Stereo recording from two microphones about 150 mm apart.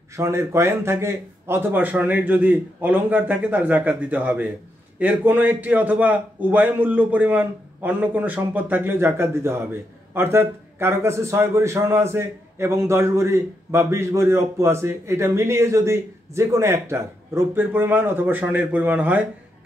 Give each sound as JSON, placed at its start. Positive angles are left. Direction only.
{"t": 0.1, "sound": "a man's voice", "side_deg": -20}